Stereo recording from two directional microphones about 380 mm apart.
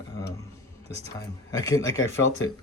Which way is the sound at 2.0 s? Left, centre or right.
Left.